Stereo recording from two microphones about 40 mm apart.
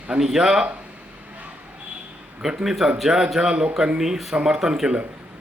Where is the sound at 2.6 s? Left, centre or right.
Centre.